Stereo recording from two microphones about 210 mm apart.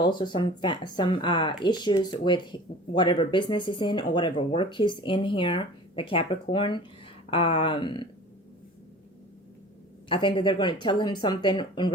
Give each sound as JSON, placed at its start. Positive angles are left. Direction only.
{"t": 0.0, "sound": "speech", "side_deg": 20}
{"t": 10.1, "sound": "speech", "side_deg": 25}